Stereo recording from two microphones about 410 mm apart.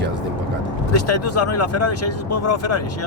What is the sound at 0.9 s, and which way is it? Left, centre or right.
Speech, left.